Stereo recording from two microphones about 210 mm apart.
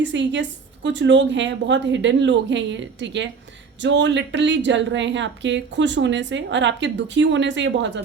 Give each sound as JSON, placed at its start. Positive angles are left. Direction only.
{"t": 0.0, "sound": "speech", "side_deg": -60}